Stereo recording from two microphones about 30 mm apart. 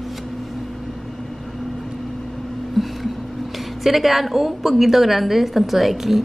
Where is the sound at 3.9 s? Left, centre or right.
Centre.